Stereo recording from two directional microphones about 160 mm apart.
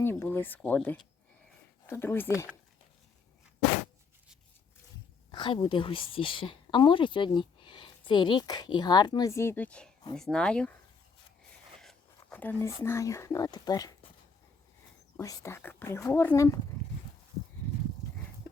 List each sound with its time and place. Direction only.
0.0 s speech: 15° left (ahead or behind)
5.3 s speech: 30° left (ahead or behind); by 10.8 s 5° left (ahead or behind)
11.8 s speech: 5° left (ahead or behind); by 14.1 s 25° left (ahead or behind)
15.1 s speech: 20° left (ahead or behind)